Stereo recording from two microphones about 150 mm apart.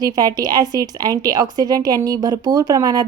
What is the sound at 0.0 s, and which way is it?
A woman's voice, 25° right (ahead or behind).